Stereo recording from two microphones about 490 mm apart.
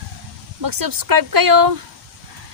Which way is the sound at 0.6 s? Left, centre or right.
Right.